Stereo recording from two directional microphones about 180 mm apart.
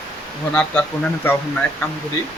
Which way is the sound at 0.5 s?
10° left (ahead or behind).